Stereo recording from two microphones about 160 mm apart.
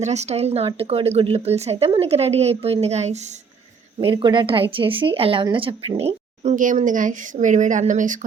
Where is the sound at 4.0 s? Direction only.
30° right (ahead or behind).